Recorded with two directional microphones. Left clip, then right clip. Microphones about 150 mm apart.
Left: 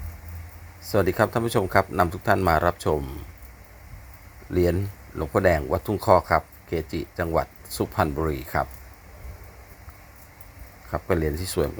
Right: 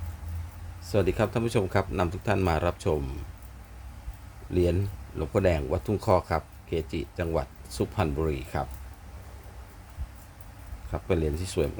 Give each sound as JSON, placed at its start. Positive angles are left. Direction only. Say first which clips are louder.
{"t": 0.9, "sound": "a man's voice", "louder": "left 4 dB", "side_deg": 20}
{"t": 4.5, "sound": "speech", "louder": "left 3 dB", "side_deg": 15}
{"t": 10.9, "sound": "a man's voice", "louder": "left 4 dB", "side_deg": 20}